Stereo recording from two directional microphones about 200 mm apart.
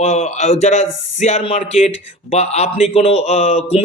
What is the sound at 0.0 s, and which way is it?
Speech, 35° left (ahead or behind).